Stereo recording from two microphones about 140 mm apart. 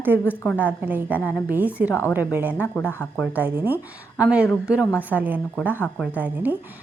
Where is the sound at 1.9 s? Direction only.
20° left (ahead or behind).